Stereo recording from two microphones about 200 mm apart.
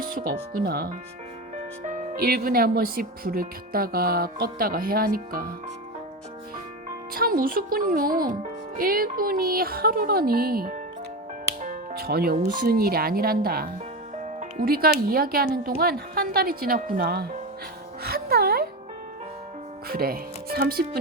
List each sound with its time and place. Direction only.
0.0 s speech: 45° right (ahead or behind)
7.1 s speech: 45° right (ahead or behind)
11.6 s music: 40° right (ahead or behind)
12.4 s speech: 45° right (ahead or behind)
18.0 s music: 50° right (ahead or behind)
19.9 s speech: 50° right (ahead or behind)